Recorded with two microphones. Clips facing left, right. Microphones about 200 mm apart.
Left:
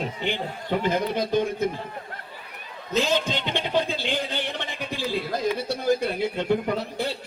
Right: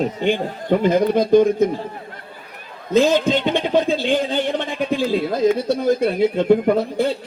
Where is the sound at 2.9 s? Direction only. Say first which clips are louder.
Right 9 dB; 50° right (ahead or behind).